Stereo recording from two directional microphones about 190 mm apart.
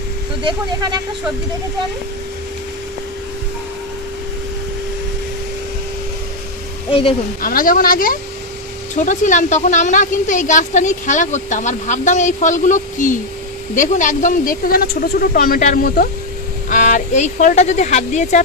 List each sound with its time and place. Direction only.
0.4 s speech: 25° right (ahead or behind)
6.9 s a woman's voice: 30° left (ahead or behind)
7.4 s a woman's voice: 50° left (ahead or behind)